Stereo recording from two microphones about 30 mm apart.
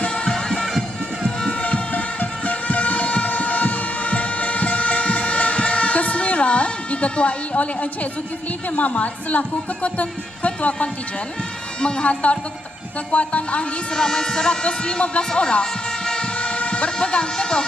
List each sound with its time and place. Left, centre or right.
0.1 s music: left
1.6 s music: left
8.7 s speech: left
11.8 s speech: left
12.0 s speech: left
13.9 s speech: left
15.3 s music: left
16.2 s vehicle: left
17.3 s speech: left